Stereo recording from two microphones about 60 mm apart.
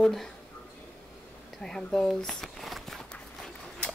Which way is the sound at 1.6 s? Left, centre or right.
Centre.